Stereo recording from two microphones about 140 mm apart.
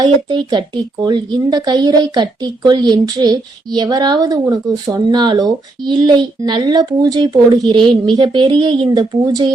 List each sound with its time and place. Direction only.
0.0 s speech: 35° right (ahead or behind)